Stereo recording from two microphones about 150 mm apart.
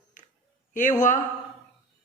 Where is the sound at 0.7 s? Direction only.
55° left (ahead or behind).